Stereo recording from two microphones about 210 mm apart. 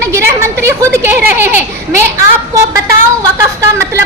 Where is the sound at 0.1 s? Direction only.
15° right (ahead or behind).